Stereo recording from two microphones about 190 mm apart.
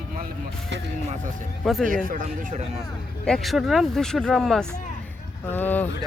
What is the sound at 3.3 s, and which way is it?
Speech, centre (ahead or behind).